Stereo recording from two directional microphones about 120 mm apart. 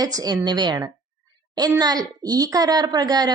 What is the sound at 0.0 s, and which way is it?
A woman's voice, 30° right (ahead or behind).